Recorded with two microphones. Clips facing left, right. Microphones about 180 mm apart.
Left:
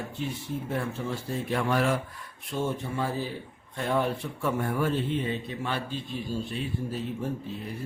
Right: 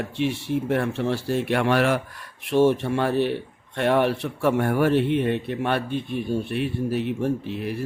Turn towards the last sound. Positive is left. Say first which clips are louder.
# right 8 dB
turn(degrees=-75)  # may be behind; listen again after turning